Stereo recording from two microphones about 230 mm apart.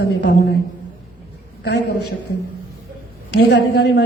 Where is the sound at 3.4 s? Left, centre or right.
Left.